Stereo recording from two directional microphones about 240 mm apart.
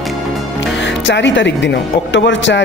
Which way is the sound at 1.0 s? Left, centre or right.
Left.